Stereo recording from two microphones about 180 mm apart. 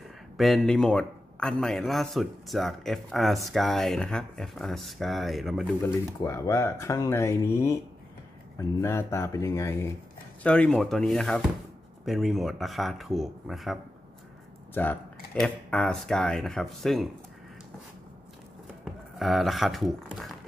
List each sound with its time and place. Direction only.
0.4 s a man's voice: centre (ahead or behind)
6.1 s a man's voice: 20° left (ahead or behind); by 13.7 s centre (ahead or behind)
14.7 s a man's voice: 10° left (ahead or behind)
19.1 s a man's voice: centre (ahead or behind)